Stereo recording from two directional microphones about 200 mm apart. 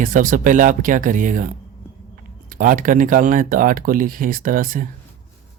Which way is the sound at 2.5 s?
45° right (ahead or behind).